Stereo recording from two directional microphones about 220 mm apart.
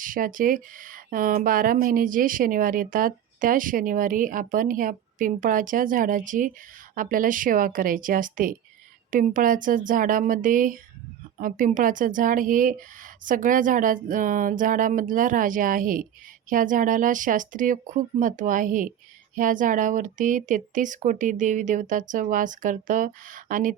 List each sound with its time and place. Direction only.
0.0 s speech: 40° right (ahead or behind)